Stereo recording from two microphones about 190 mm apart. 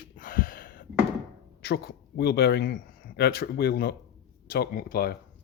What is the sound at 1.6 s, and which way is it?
Speech, 55° left (ahead or behind).